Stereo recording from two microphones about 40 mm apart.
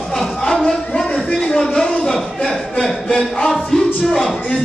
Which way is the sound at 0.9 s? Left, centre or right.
Left.